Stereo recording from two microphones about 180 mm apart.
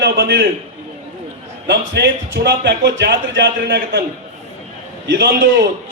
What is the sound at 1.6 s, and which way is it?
A man's voice, 75° right (ahead or behind).